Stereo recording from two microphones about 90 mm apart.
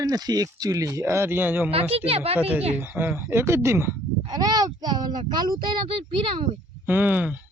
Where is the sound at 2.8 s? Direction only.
20° right (ahead or behind).